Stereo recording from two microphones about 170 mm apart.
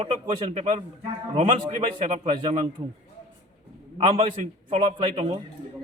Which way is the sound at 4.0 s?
35° right (ahead or behind).